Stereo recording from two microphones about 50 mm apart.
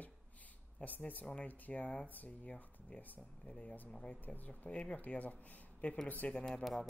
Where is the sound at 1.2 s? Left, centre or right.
Left.